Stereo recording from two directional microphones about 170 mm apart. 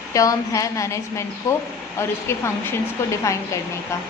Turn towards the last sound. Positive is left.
turn(degrees=15)  # may be behind; listen again after turning